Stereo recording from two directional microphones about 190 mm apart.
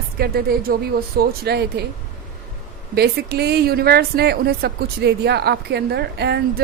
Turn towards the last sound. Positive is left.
turn(degrees=-60)  # may be behind; listen again after turning